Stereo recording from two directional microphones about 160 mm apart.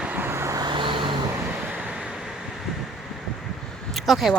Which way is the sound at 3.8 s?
Centre (ahead or behind).